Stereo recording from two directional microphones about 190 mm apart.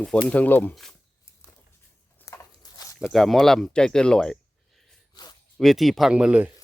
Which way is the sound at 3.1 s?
Centre (ahead or behind).